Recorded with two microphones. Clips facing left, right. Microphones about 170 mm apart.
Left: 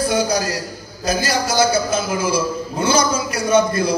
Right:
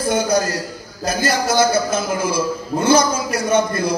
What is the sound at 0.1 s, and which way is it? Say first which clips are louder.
A man's voice: right 1 dB; 55° right (ahead or behind).